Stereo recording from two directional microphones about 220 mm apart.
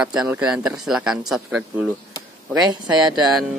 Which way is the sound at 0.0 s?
5° right (ahead or behind).